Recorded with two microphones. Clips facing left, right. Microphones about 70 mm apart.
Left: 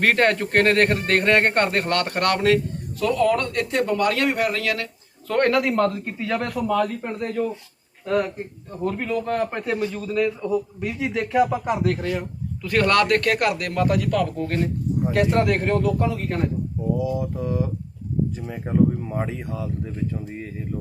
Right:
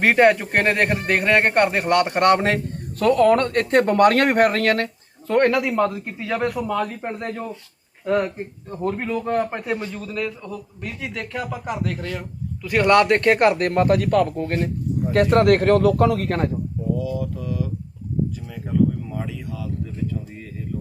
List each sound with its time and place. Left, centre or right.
0.0 s speech: centre
3.0 s speech: right
5.4 s speech: centre
8.9 s speech: centre
9.9 s a man's voice: centre
12.6 s speech: centre; by 14.7 s right
15.1 s speech: right
15.6 s speech: right
17.0 s speech: left